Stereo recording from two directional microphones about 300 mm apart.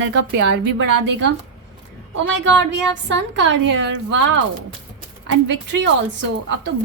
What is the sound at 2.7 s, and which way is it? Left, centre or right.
A woman's voice, right.